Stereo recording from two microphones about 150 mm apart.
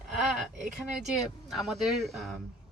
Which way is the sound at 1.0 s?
Centre (ahead or behind).